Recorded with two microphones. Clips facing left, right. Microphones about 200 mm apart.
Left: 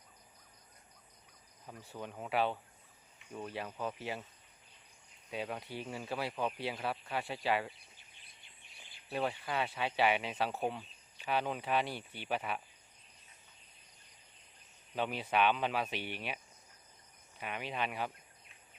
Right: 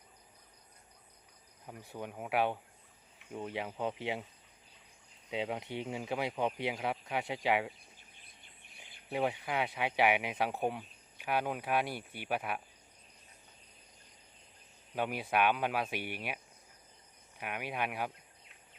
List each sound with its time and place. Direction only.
1.6 s speech: 15° right (ahead or behind)
5.3 s speech: 20° right (ahead or behind)
8.8 s speech: 15° right (ahead or behind)
14.9 s speech: 10° right (ahead or behind)